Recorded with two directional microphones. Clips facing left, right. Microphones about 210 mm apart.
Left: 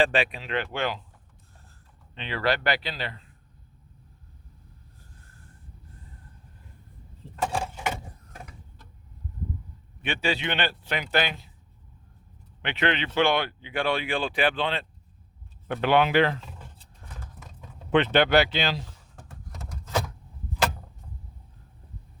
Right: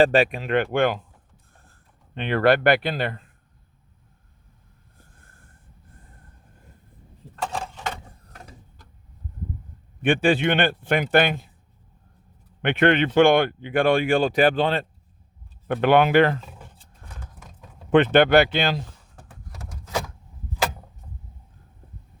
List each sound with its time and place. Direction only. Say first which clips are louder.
0.0 s speech: right 6 dB; 40° right (ahead or behind)
2.1 s speech: right 8 dB; 55° right (ahead or behind)
4.9 s a sound: right 3 dB; 50° right (ahead or behind)
7.4 s a sound: left 1 dB; 10° left (ahead or behind)
10.0 s speech: right 9 dB; 50° right (ahead or behind)
12.6 s speech: right 8 dB; 50° right (ahead or behind)
17.9 s speech: right 5 dB; 50° right (ahead or behind)